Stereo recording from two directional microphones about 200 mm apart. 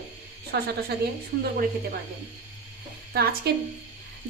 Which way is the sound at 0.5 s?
55° right (ahead or behind).